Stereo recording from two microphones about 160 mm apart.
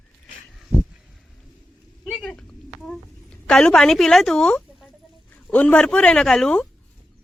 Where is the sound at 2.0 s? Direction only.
5° left (ahead or behind).